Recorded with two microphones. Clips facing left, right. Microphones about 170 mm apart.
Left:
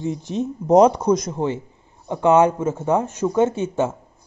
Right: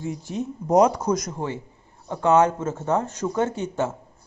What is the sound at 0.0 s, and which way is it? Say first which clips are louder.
A man's voice: left 5 dB; 20° left (ahead or behind).